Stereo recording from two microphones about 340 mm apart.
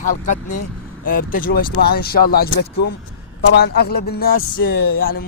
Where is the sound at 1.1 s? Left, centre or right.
Left.